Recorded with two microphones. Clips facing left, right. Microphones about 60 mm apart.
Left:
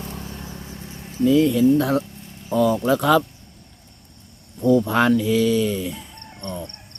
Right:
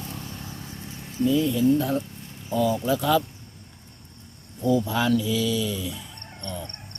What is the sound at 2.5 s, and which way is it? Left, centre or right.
Speech, left.